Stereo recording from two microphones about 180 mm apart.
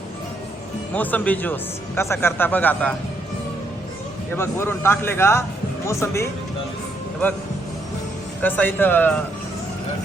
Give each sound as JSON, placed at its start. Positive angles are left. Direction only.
{"t": 0.9, "sound": "a man's voice", "side_deg": 10}
{"t": 4.4, "sound": "a man's voice", "side_deg": 15}
{"t": 8.4, "sound": "a man's voice", "side_deg": 10}